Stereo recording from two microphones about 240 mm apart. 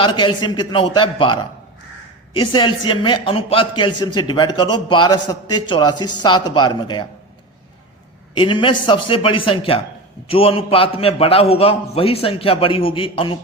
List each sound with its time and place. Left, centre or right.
0.0 s a man's voice: centre
8.4 s a man's voice: left